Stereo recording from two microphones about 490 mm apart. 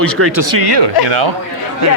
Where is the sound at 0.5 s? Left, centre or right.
Right.